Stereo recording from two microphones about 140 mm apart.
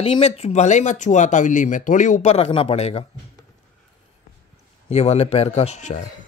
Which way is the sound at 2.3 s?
45° left (ahead or behind).